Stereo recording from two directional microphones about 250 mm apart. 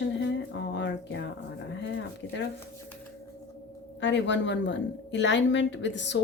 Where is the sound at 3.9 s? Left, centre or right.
Left.